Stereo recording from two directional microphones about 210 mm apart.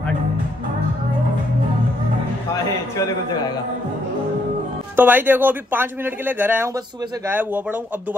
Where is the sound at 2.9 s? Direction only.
20° left (ahead or behind).